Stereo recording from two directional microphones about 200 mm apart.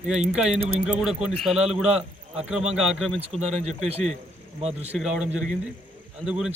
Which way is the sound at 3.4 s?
35° right (ahead or behind).